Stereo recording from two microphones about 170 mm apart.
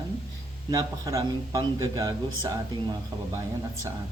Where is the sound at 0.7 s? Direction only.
20° right (ahead or behind).